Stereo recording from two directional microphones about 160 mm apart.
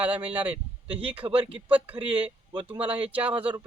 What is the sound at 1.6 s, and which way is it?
Speech, 10° right (ahead or behind).